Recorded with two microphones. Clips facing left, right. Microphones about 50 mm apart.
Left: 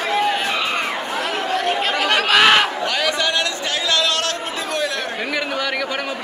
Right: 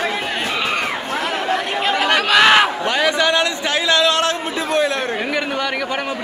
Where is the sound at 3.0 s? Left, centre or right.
Right.